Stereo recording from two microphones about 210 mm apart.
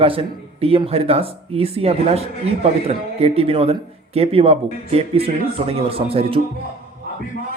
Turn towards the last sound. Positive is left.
turn(degrees=-25)  # may be behind; listen again after turning